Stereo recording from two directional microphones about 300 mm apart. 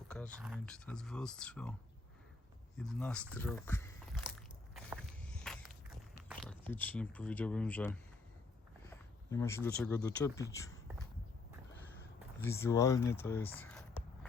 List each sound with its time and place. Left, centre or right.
0.1 s speech: centre
2.7 s speech: centre
4.7 s walk: centre
6.2 s speech: centre
10.5 s a sound: centre
12.4 s speech: centre